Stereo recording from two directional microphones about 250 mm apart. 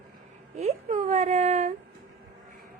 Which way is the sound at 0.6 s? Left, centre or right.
Right.